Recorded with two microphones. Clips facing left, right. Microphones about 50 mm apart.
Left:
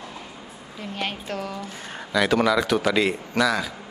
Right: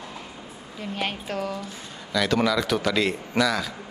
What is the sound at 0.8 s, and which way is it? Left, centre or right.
Speech, centre.